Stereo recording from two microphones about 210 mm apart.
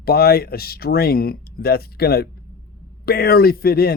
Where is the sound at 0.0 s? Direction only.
50° left (ahead or behind).